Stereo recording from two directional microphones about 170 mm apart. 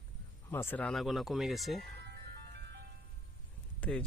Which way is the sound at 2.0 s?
70° right (ahead or behind).